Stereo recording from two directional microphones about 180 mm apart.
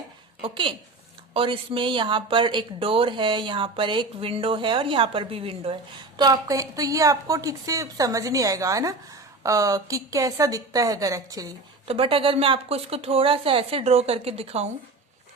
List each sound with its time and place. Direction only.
0.4 s speech: 25° right (ahead or behind)
11.9 s a woman's voice: 30° right (ahead or behind)